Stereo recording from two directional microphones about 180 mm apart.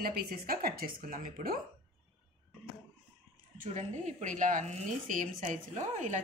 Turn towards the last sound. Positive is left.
turn(degrees=-40)  # may be behind; listen again after turning